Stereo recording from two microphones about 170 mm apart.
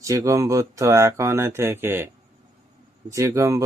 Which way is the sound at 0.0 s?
20° right (ahead or behind).